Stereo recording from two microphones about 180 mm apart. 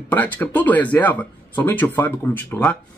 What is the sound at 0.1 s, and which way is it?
Speech, 10° left (ahead or behind).